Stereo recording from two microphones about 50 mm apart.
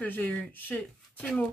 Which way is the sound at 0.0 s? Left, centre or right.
Left.